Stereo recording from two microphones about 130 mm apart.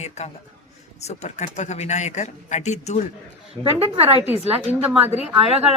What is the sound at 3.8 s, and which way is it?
Speech, 50° right (ahead or behind).